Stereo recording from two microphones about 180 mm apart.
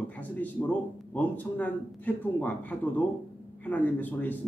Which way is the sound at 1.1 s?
10° left (ahead or behind).